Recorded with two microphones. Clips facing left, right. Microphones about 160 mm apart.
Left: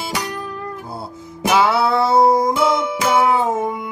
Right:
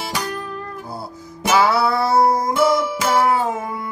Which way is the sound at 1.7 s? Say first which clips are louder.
Left 2 dB; 25° left (ahead or behind).